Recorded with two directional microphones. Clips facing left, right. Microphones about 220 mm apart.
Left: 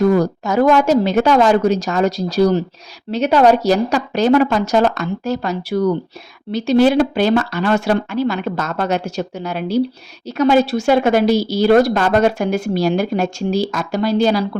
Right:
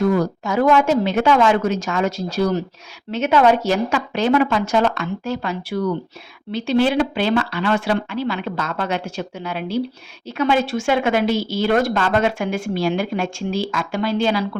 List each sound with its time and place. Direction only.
0.1 s speech: 40° left (ahead or behind)